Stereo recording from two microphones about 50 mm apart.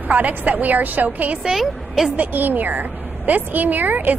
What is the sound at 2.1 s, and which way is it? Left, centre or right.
A woman's voice, right.